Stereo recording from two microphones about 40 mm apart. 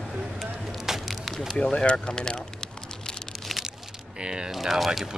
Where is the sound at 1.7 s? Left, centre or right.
Left.